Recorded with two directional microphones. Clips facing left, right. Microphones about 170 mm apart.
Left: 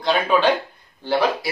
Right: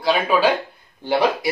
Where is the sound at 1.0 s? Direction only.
15° right (ahead or behind).